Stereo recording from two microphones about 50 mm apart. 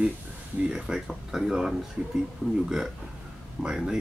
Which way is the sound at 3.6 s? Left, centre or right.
Centre.